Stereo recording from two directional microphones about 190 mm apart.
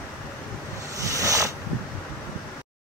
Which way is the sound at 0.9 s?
15° right (ahead or behind).